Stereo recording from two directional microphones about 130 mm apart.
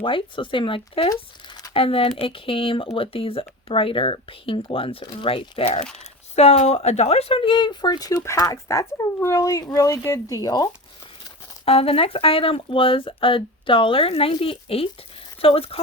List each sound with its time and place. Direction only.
0.0 s speech: 40° left (ahead or behind)
11.6 s speech: 50° left (ahead or behind)